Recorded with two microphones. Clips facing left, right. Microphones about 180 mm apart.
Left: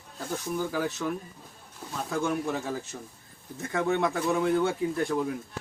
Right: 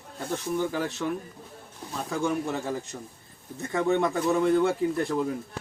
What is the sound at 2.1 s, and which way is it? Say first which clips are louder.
Speech: right 1 dB; centre (ahead or behind).